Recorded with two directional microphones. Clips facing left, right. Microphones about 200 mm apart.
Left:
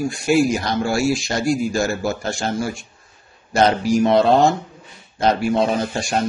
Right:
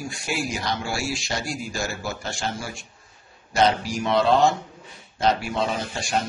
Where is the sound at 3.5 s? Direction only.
45° left (ahead or behind).